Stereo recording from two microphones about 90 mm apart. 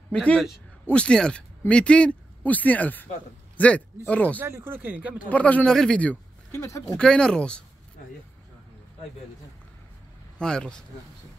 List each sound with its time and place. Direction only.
0.1 s a man's voice: 10° left (ahead or behind)
4.4 s speech: 25° right (ahead or behind)
5.3 s speech: 15° left (ahead or behind)
6.6 s speech: 35° left (ahead or behind)
7.0 s speech: 10° left (ahead or behind)
10.4 s speech: 10° left (ahead or behind)